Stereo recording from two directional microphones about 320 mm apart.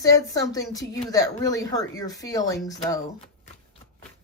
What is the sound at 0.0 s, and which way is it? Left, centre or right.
A woman's voice, centre.